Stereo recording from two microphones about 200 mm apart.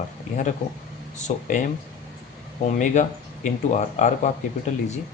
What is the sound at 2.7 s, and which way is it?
Speech, 40° left (ahead or behind).